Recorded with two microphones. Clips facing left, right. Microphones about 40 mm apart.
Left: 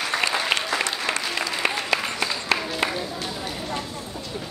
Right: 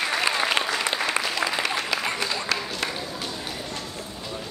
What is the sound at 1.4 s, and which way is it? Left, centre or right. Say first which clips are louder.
Applause: right 3 dB; right.